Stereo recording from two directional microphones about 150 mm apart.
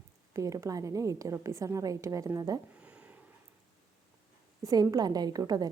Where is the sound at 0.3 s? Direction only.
20° right (ahead or behind).